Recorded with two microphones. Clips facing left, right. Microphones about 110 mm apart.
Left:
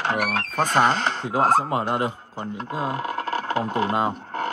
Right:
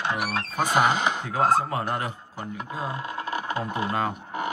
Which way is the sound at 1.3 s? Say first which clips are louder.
Left 3 dB; 50° left (ahead or behind).